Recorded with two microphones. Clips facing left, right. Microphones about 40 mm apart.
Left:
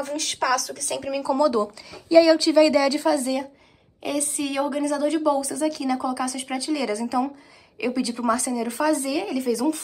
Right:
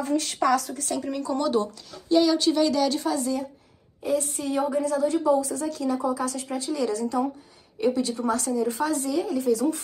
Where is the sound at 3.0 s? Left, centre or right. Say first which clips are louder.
Left 4 dB; left.